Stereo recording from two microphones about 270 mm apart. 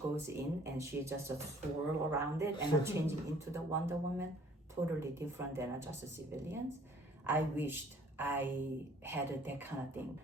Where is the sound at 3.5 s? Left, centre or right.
Centre.